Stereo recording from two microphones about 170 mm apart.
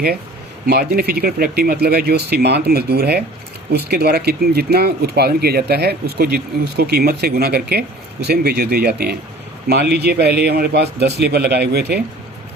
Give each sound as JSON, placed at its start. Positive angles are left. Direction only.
{"t": 0.7, "sound": "speech", "side_deg": -65}